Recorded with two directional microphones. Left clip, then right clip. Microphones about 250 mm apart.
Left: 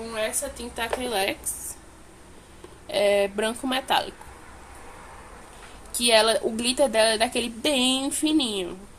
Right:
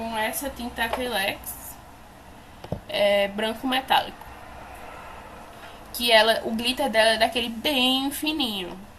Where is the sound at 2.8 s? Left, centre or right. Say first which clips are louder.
Even; left.